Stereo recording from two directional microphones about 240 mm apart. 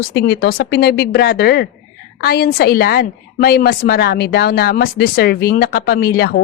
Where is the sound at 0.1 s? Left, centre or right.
Left.